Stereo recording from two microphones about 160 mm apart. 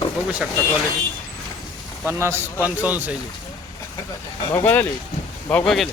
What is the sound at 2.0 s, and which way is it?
A man's voice, 15° right (ahead or behind).